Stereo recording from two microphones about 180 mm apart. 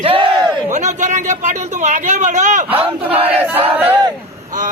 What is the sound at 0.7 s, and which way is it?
Speech, 40° right (ahead or behind).